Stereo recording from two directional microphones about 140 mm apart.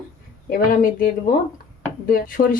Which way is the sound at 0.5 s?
80° left.